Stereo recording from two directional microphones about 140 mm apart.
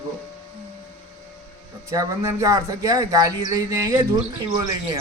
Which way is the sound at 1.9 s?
25° right (ahead or behind).